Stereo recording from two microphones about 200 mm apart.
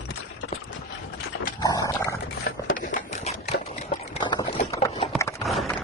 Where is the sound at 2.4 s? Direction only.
45° left (ahead or behind).